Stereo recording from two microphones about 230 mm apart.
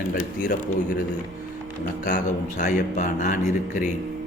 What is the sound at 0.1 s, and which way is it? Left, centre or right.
Speech, left.